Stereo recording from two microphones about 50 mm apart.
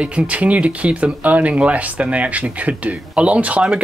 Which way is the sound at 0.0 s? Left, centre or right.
Right.